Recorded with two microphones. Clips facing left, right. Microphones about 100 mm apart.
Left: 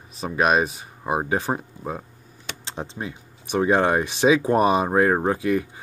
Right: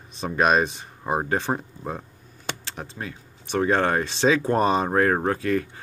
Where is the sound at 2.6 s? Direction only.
20° left (ahead or behind).